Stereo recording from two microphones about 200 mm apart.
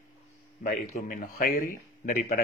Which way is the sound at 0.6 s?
45° left (ahead or behind).